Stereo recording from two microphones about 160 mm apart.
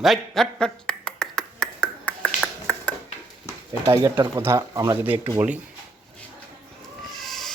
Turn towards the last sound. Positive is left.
turn(degrees=0)  # may be behind; listen again after turning